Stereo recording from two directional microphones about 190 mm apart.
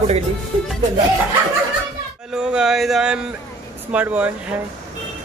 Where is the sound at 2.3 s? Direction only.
5° right (ahead or behind).